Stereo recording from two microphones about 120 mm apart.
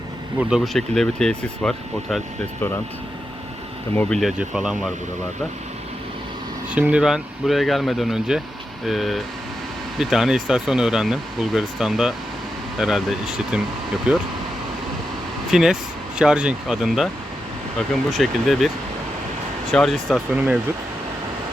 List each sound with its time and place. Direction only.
0.3 s speech: 5° right (ahead or behind)
3.9 s speech: 5° left (ahead or behind)
4.3 s speech: 5° right (ahead or behind)
6.7 s speech: 10° right (ahead or behind)
15.5 s speech: 5° right (ahead or behind)
18.1 s speech: centre (ahead or behind)
19.7 s speech: centre (ahead or behind)